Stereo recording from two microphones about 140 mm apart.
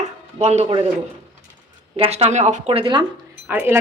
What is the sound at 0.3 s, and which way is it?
Speech, 50° right (ahead or behind).